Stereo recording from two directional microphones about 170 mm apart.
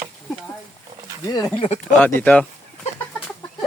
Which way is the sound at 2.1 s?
10° left (ahead or behind).